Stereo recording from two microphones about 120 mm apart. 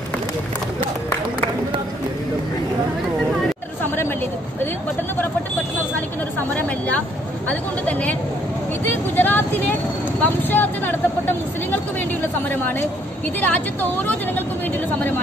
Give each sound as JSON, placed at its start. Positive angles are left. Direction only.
{"t": 7.4, "sound": "a woman's voice", "side_deg": 15}
{"t": 10.2, "sound": "a sound", "side_deg": 15}
{"t": 13.4, "sound": "a woman's voice", "side_deg": 15}